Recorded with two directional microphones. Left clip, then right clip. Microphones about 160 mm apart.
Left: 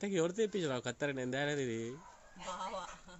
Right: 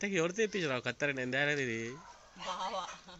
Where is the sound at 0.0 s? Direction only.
15° left (ahead or behind).